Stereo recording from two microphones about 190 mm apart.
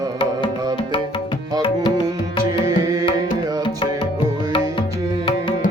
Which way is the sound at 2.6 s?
20° right (ahead or behind).